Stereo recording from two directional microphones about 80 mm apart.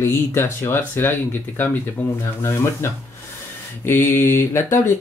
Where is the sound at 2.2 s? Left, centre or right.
Left.